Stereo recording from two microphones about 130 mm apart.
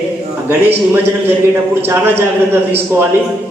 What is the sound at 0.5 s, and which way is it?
A man's voice, 15° right (ahead or behind).